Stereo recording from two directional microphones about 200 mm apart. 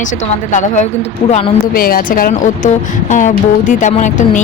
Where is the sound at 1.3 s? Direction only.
40° left (ahead or behind).